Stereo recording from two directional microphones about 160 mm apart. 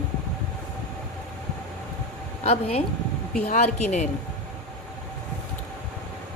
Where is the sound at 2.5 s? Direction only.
40° left (ahead or behind).